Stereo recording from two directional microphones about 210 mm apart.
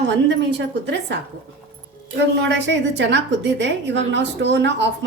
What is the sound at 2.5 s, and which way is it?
A woman's voice, 55° right (ahead or behind).